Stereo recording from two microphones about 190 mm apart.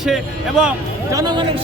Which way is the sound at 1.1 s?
20° right (ahead or behind).